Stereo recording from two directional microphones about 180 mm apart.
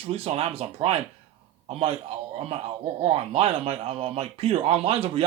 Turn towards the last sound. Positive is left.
turn(degrees=-35)  # may be behind; listen again after turning